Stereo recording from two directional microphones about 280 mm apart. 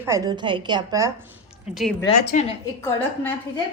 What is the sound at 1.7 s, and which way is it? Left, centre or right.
Speech, centre.